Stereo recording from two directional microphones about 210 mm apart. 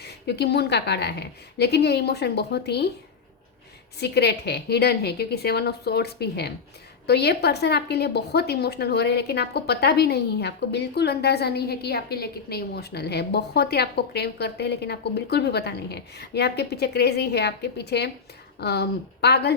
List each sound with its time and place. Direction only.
0.0 s a woman's voice: 50° left (ahead or behind)
4.0 s a woman's voice: 50° left (ahead or behind)